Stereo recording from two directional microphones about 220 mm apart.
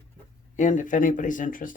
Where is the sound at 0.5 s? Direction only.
35° left (ahead or behind).